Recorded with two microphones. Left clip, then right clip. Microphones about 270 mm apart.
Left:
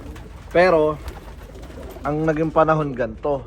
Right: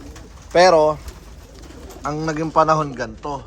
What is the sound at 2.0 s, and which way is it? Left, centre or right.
A man's voice, centre.